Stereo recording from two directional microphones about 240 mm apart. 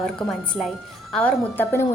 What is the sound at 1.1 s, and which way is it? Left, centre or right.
Speech, centre.